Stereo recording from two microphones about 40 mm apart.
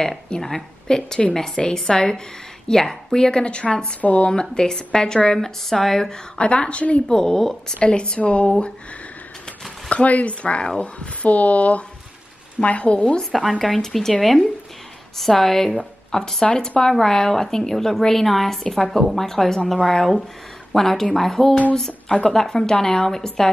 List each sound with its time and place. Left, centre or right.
0.4 s a woman's voice: centre; by 3.9 s left
4.0 s speech: left
4.3 s a woman's voice: left
6.3 s a woman's voice: left
7.1 s a woman's voice: centre
7.8 s a woman's voice: left
9.8 s speech: left
11.2 s speech: left
13.2 s a woman's voice: centre